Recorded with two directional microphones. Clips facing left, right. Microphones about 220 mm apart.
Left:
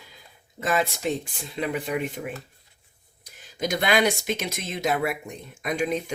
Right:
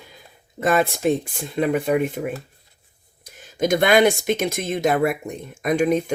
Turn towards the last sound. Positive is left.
turn(degrees=-50)  # may be behind; listen again after turning